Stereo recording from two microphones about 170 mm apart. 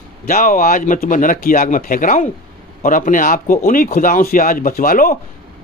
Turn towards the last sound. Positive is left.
turn(degrees=55)  # may be behind; listen again after turning